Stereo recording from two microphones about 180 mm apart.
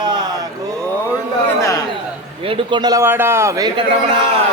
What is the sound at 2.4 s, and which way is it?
A man's voice, 30° right (ahead or behind).